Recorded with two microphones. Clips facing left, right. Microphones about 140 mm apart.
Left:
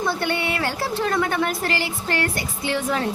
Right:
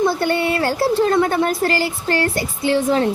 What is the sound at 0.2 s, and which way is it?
Speech, 40° right (ahead or behind).